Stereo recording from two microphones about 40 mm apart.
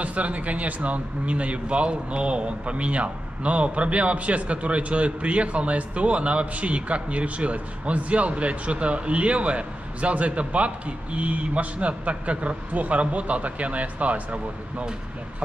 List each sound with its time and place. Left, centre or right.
0.0 s speech: right